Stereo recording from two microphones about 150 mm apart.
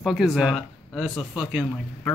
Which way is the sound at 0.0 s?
Centre (ahead or behind).